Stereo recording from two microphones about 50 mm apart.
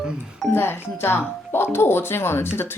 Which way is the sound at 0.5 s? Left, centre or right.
Left.